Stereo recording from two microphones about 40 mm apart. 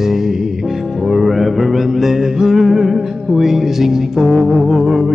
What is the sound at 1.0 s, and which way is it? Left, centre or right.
Mantra, centre.